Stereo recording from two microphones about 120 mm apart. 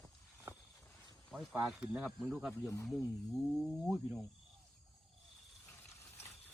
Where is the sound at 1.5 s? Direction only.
5° right (ahead or behind).